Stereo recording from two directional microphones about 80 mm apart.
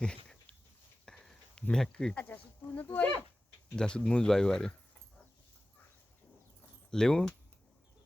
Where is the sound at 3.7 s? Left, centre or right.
Centre.